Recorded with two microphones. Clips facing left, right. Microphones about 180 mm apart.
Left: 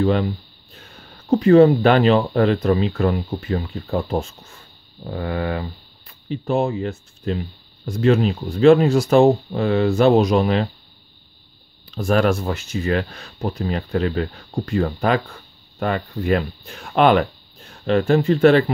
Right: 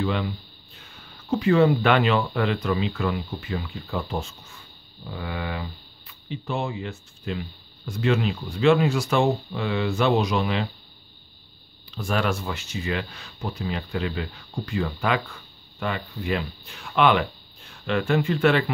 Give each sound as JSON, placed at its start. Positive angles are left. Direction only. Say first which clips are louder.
{"t": 0.0, "sound": "speech", "louder": "left 7 dB", "side_deg": 40}
{"t": 11.9, "sound": "speech", "louder": "left 8 dB", "side_deg": 45}